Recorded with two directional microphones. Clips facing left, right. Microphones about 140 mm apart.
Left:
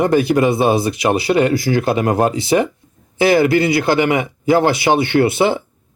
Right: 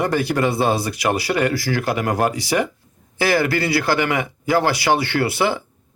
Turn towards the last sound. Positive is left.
turn(degrees=25)  # may be behind; listen again after turning